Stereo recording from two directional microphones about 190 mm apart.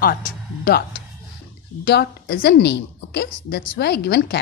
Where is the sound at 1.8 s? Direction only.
55° left (ahead or behind).